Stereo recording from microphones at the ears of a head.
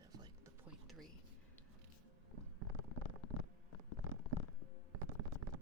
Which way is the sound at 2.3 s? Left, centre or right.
Right.